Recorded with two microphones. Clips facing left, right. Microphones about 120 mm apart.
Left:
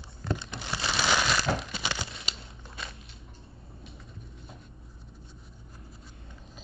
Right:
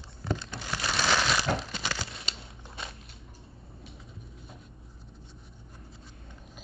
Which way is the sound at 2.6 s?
25° right (ahead or behind).